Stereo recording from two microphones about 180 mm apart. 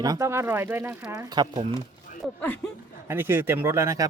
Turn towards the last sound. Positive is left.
turn(degrees=-15)  # may be behind; listen again after turning